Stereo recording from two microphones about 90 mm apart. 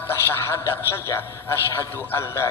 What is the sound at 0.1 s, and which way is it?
A man's voice, 25° left (ahead or behind).